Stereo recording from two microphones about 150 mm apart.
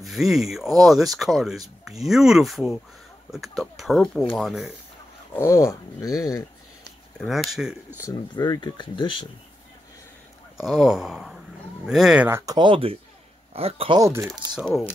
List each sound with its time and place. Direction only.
0.0 s speech: centre (ahead or behind)
5.3 s speech: 20° left (ahead or behind)
7.2 s speech: centre (ahead or behind)
8.0 s speech: 25° left (ahead or behind)
10.6 s speech: 5° right (ahead or behind)
12.3 s speech: 15° right (ahead or behind)
12.5 s speech: 35° right (ahead or behind)
13.9 s speech: 20° right (ahead or behind)
14.5 s speech: 5° right (ahead or behind)